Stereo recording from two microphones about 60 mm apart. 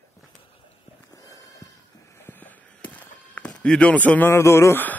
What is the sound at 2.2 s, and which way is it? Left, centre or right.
Walk, left.